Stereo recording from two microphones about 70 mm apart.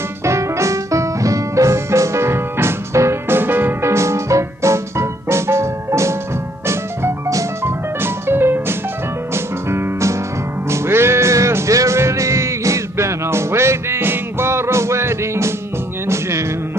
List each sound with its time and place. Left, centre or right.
0.2 s music: right
3.9 s music: right
8.0 s music: right